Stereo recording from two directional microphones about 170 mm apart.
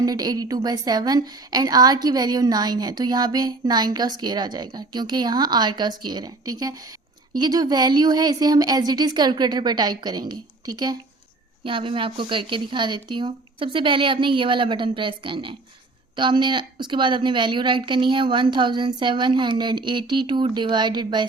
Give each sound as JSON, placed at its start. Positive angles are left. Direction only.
{"t": 0.0, "sound": "a woman's voice", "side_deg": -20}